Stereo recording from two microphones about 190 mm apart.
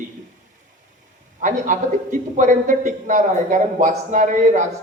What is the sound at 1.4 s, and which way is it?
A man's voice, 40° right (ahead or behind).